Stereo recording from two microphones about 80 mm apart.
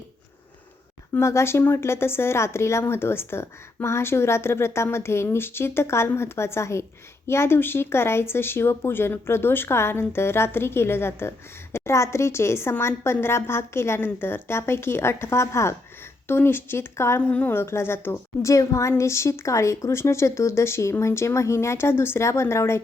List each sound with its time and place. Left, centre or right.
1.1 s speech: left